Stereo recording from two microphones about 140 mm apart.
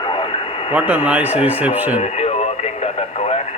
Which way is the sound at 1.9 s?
50° left (ahead or behind).